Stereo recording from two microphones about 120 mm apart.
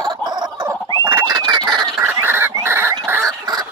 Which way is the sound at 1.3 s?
35° right (ahead or behind).